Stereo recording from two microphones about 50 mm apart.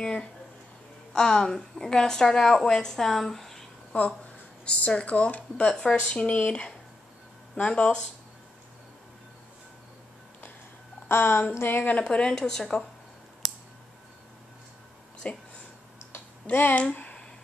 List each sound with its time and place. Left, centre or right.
0.0 s a woman's voice: centre
3.9 s speech: left
11.1 s a woman's voice: left
12.0 s a woman's voice: left
15.2 s speech: left
16.4 s speech: left